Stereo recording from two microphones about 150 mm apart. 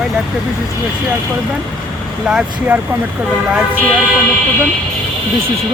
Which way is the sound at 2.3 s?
10° right (ahead or behind).